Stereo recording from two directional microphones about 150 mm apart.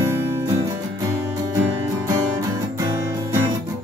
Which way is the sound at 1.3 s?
25° right (ahead or behind).